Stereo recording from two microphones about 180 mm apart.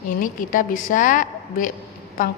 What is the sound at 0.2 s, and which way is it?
A woman's voice, 50° left (ahead or behind).